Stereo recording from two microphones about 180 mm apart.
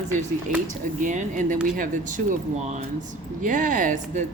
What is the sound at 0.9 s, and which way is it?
Speech, 45° right (ahead or behind).